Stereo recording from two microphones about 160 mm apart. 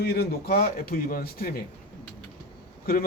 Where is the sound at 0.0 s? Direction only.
85° left; by 1.5 s 65° left (ahead or behind).